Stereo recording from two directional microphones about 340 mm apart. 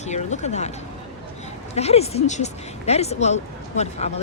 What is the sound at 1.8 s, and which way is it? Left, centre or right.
Speech, centre.